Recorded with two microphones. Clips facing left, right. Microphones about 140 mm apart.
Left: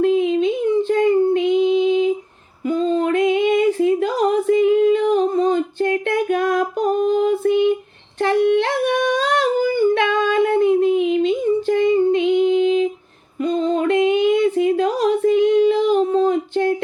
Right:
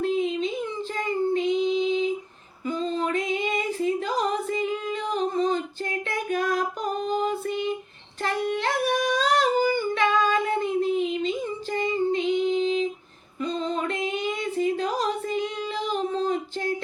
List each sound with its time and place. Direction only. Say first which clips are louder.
0.0 s child singing: left 8 dB; 55° left (ahead or behind)
2.6 s female singing: left 8 dB; 50° left (ahead or behind)
8.2 s singing: left 10 dB; 60° left (ahead or behind)
13.4 s a sound: left 9 dB; 50° left (ahead or behind)